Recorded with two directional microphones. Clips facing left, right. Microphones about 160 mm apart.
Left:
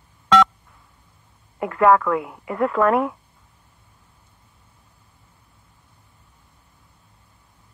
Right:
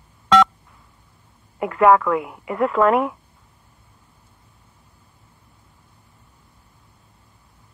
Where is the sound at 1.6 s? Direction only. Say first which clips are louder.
Right 1 dB; 15° right (ahead or behind).